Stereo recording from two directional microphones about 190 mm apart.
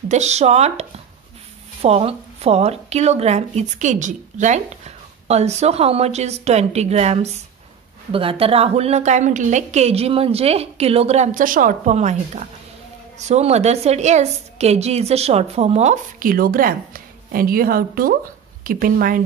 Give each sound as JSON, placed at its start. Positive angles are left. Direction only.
{"t": 0.1, "sound": "a woman's voice", "side_deg": -35}